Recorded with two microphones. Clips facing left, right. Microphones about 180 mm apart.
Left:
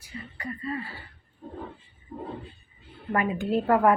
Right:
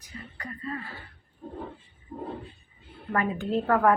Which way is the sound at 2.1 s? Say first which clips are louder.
Right 1 dB; 15° right (ahead or behind).